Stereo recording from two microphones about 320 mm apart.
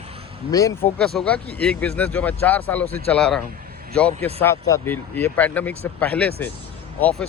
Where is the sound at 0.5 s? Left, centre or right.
Centre.